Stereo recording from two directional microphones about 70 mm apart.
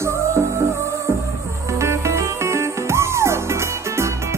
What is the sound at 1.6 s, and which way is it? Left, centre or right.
Music, right.